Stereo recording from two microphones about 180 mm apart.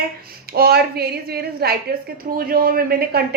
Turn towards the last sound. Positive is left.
turn(degrees=-60)  # may be behind; listen again after turning